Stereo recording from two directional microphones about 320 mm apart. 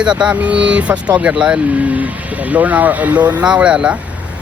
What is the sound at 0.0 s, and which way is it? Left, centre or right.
Speech, centre.